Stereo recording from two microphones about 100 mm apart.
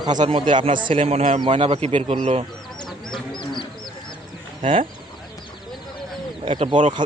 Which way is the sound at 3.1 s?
50° left (ahead or behind).